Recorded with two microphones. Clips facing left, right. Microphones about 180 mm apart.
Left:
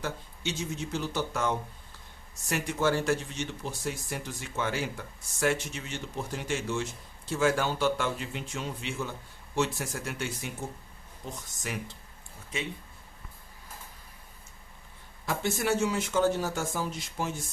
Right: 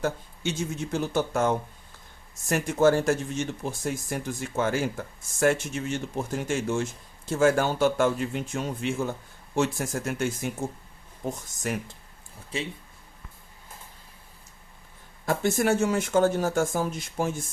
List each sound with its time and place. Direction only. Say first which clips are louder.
0.0 s speech: right 6 dB; 50° right (ahead or behind)
12.5 s speech: right 3 dB; 35° right (ahead or behind)
15.3 s speech: right 5 dB; 50° right (ahead or behind)